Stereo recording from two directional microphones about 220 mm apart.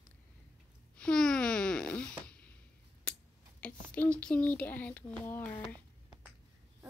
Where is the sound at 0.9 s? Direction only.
5° left (ahead or behind).